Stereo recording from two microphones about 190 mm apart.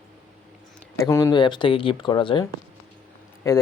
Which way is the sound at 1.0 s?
15° left (ahead or behind).